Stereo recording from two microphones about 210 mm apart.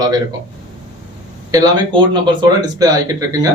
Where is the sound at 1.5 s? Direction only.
20° right (ahead or behind).